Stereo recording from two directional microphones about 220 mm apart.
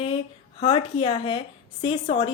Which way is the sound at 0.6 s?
25° left (ahead or behind).